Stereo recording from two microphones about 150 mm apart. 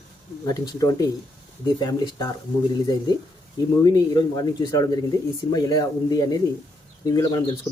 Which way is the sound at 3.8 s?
25° left (ahead or behind).